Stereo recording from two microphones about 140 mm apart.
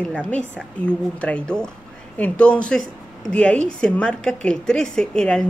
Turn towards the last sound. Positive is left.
turn(degrees=5)  # may be behind; listen again after turning